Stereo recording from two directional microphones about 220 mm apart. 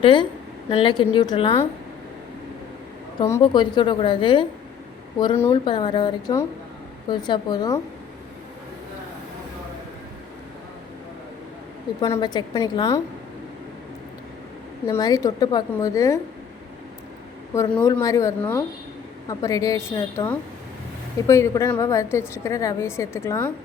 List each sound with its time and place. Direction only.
0.0 s a woman's voice: 20° left (ahead or behind)
3.2 s a woman's voice: 15° left (ahead or behind)
5.5 s a woman's voice: 20° left (ahead or behind)
11.9 s a woman's voice: 20° left (ahead or behind)
14.8 s a woman's voice: 15° left (ahead or behind)
17.5 s a woman's voice: 10° left (ahead or behind)